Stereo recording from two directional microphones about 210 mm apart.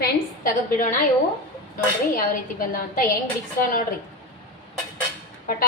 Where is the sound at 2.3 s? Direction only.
40° left (ahead or behind).